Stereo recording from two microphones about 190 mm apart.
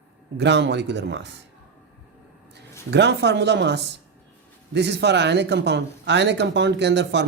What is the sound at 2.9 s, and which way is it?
Speech, 65° right (ahead or behind).